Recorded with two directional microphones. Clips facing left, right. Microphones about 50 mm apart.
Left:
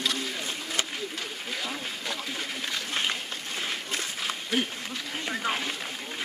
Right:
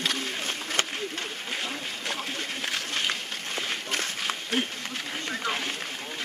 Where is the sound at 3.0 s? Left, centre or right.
Centre.